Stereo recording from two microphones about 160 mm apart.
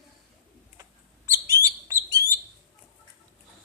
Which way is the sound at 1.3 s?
20° right (ahead or behind).